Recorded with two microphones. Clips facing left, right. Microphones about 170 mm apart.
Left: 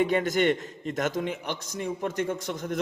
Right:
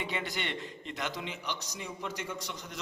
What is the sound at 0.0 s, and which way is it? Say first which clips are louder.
A man's voice: left 13 dB; 45° left (ahead or behind).